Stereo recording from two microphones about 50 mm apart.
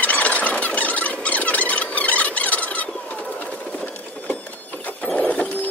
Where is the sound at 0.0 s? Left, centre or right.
Left.